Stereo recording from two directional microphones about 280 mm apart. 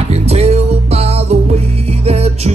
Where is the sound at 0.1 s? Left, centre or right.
Right.